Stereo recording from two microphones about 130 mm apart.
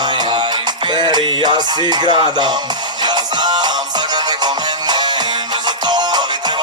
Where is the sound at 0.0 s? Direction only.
35° right (ahead or behind).